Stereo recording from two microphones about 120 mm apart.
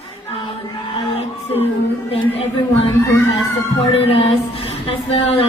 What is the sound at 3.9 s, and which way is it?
A woman's voice, 50° left (ahead or behind).